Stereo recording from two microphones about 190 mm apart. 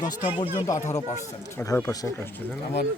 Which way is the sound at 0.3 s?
30° left (ahead or behind).